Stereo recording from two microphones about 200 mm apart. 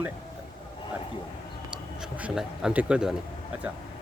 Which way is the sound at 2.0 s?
5° right (ahead or behind).